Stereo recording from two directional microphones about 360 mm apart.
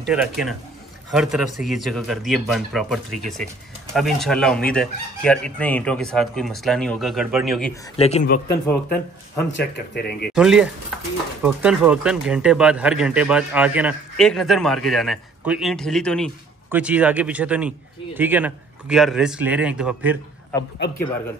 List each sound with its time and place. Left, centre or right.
0.0 s speech: centre
8.0 s speech: centre
9.6 s speech: left
10.3 s speech: centre